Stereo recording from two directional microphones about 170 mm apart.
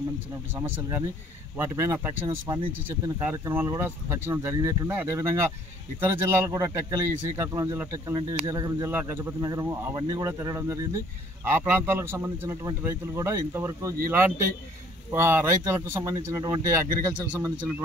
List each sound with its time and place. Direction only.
0.6 s speech: 20° right (ahead or behind)